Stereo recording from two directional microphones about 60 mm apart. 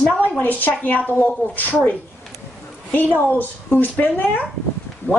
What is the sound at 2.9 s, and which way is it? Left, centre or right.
A woman's voice, left.